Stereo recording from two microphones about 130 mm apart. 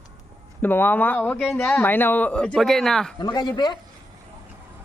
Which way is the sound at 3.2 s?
35° left (ahead or behind).